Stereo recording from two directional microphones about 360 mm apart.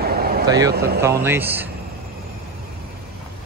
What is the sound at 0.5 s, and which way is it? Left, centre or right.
Speech, centre.